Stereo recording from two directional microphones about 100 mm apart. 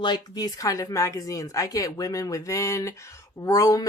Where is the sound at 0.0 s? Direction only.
45° left (ahead or behind).